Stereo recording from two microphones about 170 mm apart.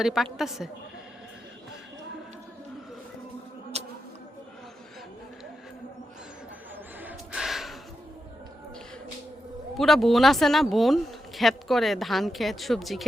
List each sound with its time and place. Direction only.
0.0 s speech: centre (ahead or behind)
3.7 s music: 40° right (ahead or behind)
7.0 s gasp: 5° right (ahead or behind)
9.7 s speech: centre (ahead or behind)